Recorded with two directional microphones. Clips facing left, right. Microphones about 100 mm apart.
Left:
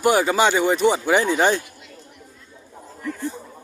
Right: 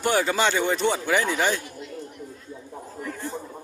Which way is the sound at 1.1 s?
25° left (ahead or behind).